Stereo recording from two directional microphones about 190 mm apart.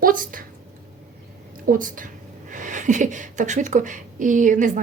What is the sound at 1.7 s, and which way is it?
Speech, 45° right (ahead or behind).